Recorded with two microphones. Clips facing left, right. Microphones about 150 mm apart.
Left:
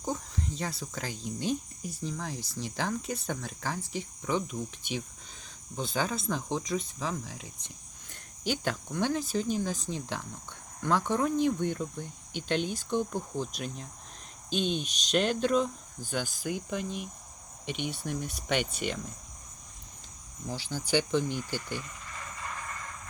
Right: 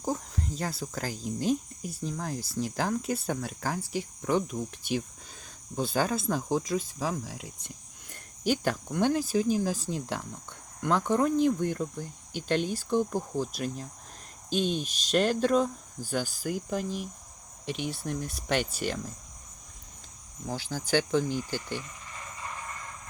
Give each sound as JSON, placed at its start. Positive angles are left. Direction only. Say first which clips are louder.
{"t": 0.0, "sound": "speech", "louder": "right 2 dB", "side_deg": 0}
{"t": 20.5, "sound": "speech", "louder": "right 1 dB", "side_deg": -40}